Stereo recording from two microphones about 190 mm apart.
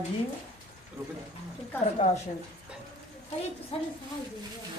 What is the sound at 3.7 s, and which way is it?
Speech, 30° left (ahead or behind).